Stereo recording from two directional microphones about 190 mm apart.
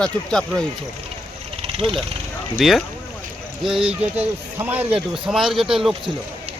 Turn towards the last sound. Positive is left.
turn(degrees=0)  # may be behind; listen again after turning